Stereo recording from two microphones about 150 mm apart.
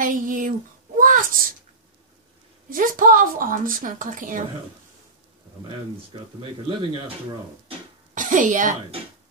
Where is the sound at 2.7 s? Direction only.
65° right (ahead or behind).